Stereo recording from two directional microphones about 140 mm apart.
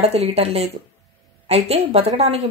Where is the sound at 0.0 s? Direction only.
45° right (ahead or behind).